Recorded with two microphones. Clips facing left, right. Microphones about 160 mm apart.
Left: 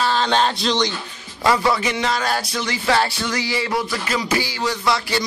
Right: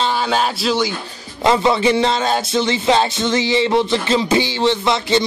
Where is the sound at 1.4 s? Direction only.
20° right (ahead or behind).